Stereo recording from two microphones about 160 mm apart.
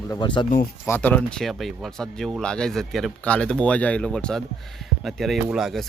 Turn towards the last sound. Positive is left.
turn(degrees=0)  # may be behind; listen again after turning